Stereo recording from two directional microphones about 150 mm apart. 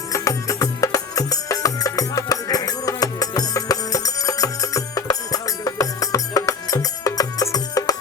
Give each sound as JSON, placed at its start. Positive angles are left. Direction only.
{"t": 0.1, "sound": "music", "side_deg": 20}